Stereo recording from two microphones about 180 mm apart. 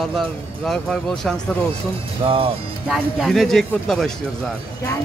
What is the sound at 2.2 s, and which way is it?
Speech, 30° right (ahead or behind).